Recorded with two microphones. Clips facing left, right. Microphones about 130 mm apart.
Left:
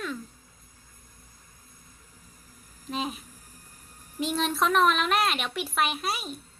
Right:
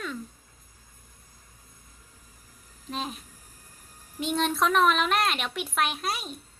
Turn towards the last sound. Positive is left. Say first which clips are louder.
# left 1 dB
turn(degrees=0)  # may be behind; listen again after turning